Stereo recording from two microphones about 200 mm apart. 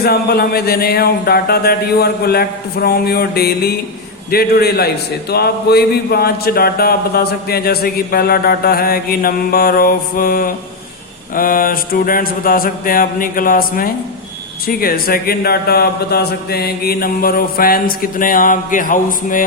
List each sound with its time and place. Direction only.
0.0 s speech: 50° left (ahead or behind)